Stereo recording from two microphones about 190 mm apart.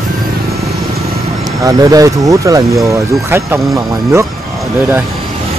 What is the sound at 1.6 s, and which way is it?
Speech, 20° right (ahead or behind).